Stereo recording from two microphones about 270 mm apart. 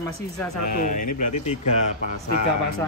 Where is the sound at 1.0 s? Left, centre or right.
Left.